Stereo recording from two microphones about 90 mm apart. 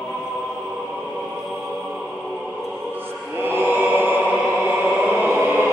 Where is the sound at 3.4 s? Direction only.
20° right (ahead or behind).